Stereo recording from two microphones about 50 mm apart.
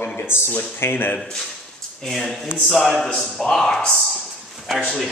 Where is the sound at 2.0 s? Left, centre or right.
Centre.